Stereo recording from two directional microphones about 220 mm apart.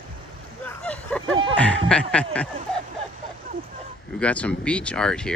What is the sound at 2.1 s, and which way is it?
Speech, 5° left (ahead or behind).